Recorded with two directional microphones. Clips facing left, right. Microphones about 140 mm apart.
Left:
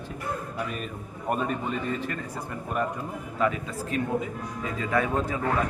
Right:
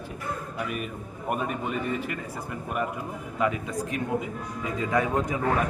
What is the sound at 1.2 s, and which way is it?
Speech, 10° right (ahead or behind).